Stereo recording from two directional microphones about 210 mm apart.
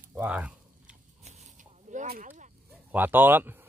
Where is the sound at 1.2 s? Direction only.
30° right (ahead or behind).